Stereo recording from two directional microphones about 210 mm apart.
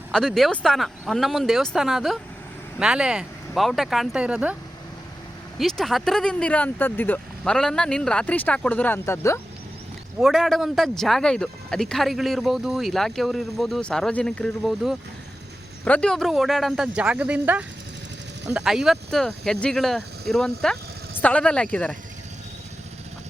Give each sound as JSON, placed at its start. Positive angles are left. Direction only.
{"t": 0.1, "sound": "a man's voice", "side_deg": 0}
{"t": 5.5, "sound": "a man's voice", "side_deg": 0}
{"t": 10.2, "sound": "a man's voice", "side_deg": 0}